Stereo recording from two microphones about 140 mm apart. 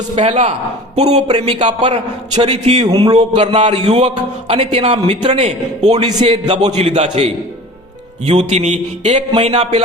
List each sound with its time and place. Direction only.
0.2 s a man's voice: 60° right (ahead or behind)
2.8 s speech: 30° right (ahead or behind)
3.5 s a man's voice: 40° right (ahead or behind)